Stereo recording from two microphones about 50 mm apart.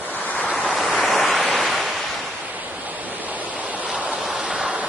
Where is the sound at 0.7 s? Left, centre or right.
Centre.